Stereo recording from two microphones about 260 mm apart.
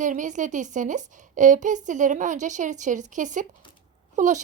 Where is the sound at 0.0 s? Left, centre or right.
Right.